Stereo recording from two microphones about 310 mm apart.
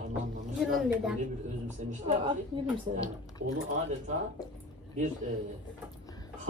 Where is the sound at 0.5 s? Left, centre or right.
Centre.